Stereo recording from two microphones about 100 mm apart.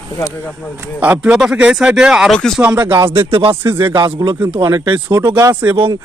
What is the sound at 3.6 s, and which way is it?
Speech, 25° right (ahead or behind).